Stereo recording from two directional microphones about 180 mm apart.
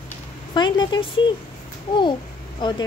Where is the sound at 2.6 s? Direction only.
25° left (ahead or behind).